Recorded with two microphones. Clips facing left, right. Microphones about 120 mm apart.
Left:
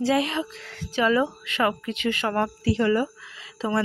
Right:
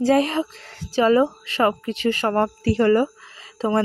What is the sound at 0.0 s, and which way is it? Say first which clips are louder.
Speech: right 5 dB; 40° right (ahead or behind).